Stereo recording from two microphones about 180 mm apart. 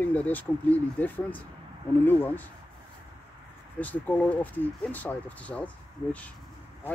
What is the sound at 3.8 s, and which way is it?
Speech, 10° left (ahead or behind).